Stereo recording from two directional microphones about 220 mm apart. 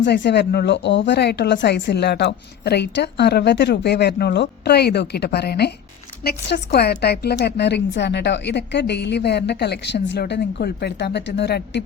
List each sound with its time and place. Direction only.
0.0 s speech: 50° left (ahead or behind)